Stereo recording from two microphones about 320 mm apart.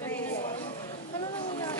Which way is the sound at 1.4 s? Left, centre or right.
Centre.